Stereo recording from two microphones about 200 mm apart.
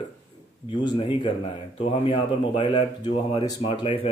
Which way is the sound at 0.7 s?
25° left (ahead or behind).